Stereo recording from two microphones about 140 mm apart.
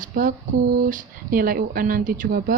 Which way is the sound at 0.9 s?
80° right.